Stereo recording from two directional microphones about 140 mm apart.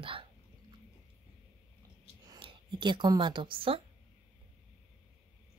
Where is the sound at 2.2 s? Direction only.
35° right (ahead or behind).